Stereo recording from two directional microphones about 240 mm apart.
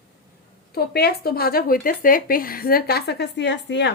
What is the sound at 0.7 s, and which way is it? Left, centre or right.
Speech, left.